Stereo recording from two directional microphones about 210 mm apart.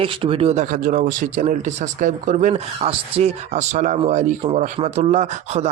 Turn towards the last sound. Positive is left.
turn(degrees=-35)  # may be behind; listen again after turning